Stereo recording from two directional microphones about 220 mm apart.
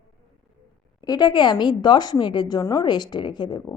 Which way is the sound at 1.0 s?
20° left (ahead or behind).